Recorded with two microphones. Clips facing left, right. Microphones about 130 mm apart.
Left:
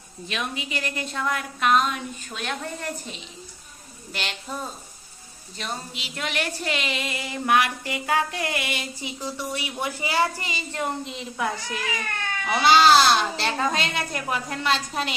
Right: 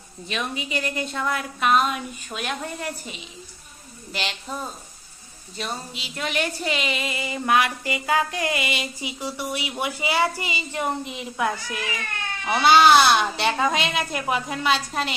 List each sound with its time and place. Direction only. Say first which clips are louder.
0.3 s speech: right 2 dB; centre (ahead or behind)
12.5 s a woman's voice: right 1 dB; 5° right (ahead or behind)